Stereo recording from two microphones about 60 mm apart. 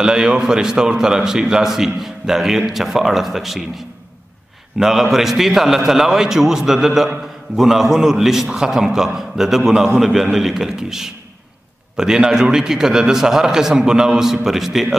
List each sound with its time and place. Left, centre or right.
0.0 s a man's voice: centre